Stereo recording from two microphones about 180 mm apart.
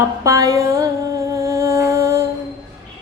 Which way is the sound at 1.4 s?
15° right (ahead or behind).